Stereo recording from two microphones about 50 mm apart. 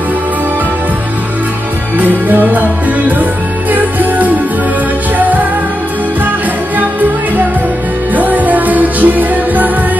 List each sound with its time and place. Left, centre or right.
2.2 s music: right
3.7 s music: right
8.1 s music: right